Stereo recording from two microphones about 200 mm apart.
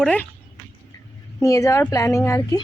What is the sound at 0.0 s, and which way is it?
Speech, 5° left (ahead or behind).